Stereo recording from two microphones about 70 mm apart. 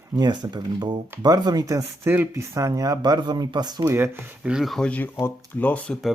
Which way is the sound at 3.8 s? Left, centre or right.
Right.